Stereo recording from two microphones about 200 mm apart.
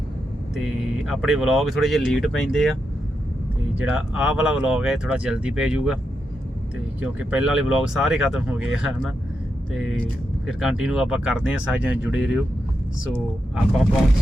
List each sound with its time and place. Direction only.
0.5 s speech: centre (ahead or behind)
3.8 s speech: 5° right (ahead or behind)
7.0 s speech: 5° right (ahead or behind)